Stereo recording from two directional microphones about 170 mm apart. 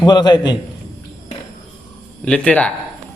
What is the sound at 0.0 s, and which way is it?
Speech, 25° left (ahead or behind).